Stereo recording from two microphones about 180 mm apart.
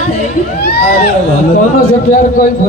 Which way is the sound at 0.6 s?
65° left (ahead or behind).